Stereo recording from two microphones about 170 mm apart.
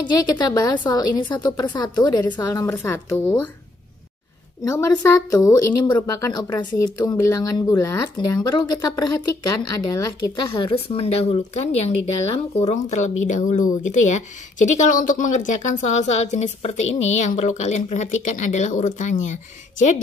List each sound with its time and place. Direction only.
0.0 s a woman's voice: 20° left (ahead or behind)
4.6 s a woman's voice: 15° left (ahead or behind); by 20.0 s 45° left (ahead or behind)